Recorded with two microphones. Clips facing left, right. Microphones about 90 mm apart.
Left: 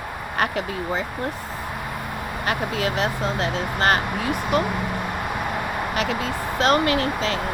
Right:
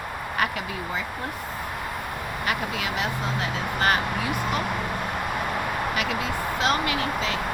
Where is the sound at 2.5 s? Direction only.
40° left (ahead or behind).